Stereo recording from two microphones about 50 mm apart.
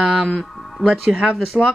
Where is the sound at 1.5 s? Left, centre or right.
Centre.